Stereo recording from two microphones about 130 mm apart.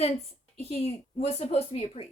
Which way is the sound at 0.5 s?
55° left (ahead or behind).